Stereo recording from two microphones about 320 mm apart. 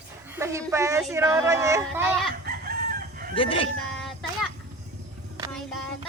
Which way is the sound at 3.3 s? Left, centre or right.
Centre.